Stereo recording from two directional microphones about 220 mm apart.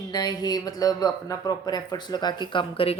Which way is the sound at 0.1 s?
20° left (ahead or behind).